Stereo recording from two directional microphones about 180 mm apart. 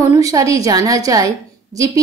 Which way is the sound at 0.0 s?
15° right (ahead or behind).